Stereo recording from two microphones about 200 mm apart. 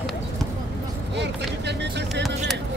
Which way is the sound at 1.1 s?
60° right (ahead or behind).